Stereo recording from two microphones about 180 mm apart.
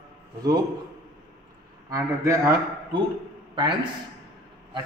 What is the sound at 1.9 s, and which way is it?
Speech, 15° right (ahead or behind).